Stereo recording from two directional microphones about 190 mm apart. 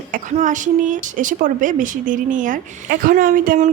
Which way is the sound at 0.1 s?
40° right (ahead or behind).